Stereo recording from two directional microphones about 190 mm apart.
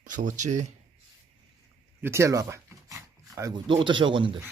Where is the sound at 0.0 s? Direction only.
40° right (ahead or behind).